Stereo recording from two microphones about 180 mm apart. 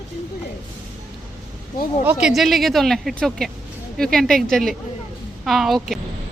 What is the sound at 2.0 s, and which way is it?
Speech, 5° right (ahead or behind).